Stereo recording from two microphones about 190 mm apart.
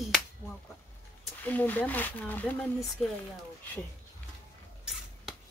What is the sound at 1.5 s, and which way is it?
Speech, 10° left (ahead or behind).